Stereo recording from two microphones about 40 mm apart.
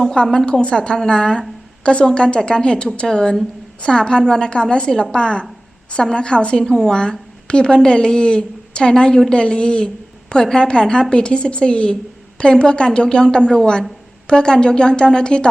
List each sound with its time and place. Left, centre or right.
0.0 s a woman's voice: centre